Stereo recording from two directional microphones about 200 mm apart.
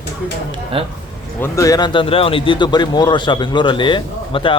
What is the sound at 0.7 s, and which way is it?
Speech, 30° right (ahead or behind).